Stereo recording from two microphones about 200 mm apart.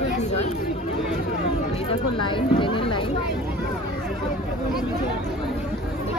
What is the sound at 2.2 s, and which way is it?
Speech, 25° left (ahead or behind).